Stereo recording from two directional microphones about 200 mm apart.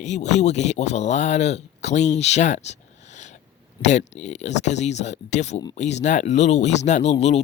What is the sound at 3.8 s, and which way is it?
Speech, 35° left (ahead or behind).